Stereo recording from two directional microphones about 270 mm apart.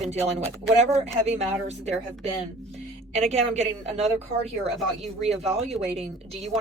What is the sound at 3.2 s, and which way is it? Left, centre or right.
Speech, right.